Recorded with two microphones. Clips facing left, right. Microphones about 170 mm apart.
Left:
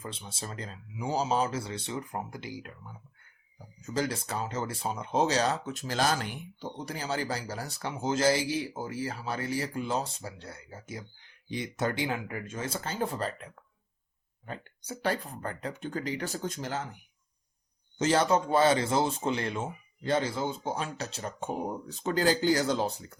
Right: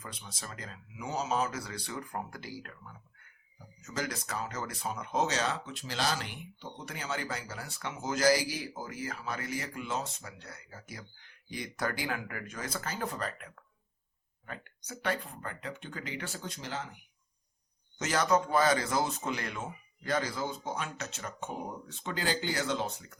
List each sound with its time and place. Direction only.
0.0 s speech: 25° left (ahead or behind)
3.8 s speech: 30° left (ahead or behind); by 16.8 s 45° left (ahead or behind)
17.9 s speech: 30° left (ahead or behind)